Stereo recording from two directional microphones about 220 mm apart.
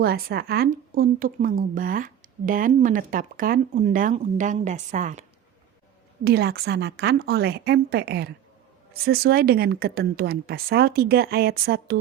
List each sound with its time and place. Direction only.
0.0 s speech: 45° right (ahead or behind)
6.2 s a woman's voice: 45° right (ahead or behind)